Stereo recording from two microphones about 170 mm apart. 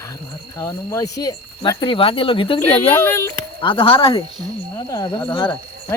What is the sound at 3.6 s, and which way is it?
Speech, 30° left (ahead or behind).